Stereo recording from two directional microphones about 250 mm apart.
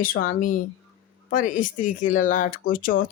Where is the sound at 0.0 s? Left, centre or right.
Left.